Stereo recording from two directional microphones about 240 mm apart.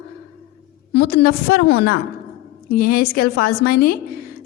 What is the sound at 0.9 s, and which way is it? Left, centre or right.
A woman's voice, left.